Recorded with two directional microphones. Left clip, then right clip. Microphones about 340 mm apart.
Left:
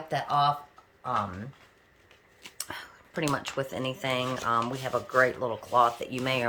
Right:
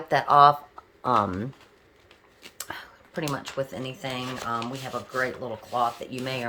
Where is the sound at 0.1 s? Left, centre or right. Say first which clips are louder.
Right 9 dB; centre.